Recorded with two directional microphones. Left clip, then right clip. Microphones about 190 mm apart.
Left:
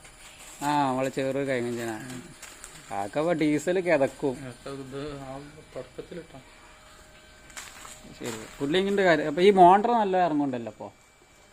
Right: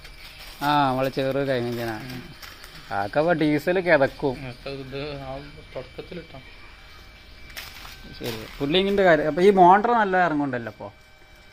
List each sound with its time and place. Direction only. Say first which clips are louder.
0.6 s speech: right 4 dB; 5° left (ahead or behind)
8.2 s a man's voice: right 3 dB; 5° left (ahead or behind); by 10.7 s 25° left (ahead or behind)
10.7 s speech: right 3 dB; 15° left (ahead or behind)